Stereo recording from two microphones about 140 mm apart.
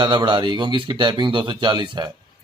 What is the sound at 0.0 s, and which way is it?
Speech, 30° right (ahead or behind).